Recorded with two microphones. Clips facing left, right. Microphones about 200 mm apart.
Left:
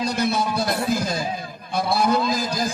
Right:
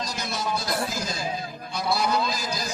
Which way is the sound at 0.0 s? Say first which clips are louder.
Left 8 dB; 60° left (ahead or behind).